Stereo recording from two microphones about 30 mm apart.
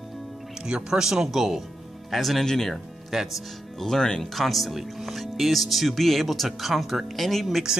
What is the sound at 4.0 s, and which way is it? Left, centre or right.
Speech, left.